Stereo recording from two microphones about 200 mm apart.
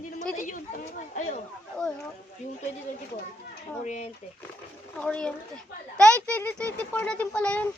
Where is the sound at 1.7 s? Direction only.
5° left (ahead or behind).